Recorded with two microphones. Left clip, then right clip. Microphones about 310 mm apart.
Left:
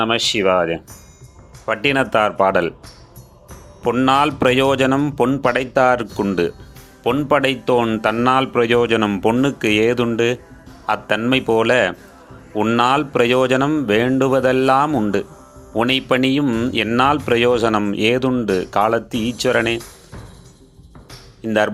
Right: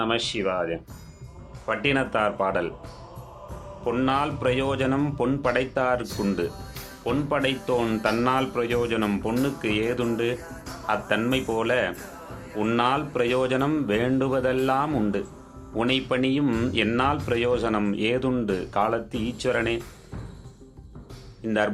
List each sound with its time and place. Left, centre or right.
0.0 s speech: left
3.8 s speech: left
21.4 s speech: centre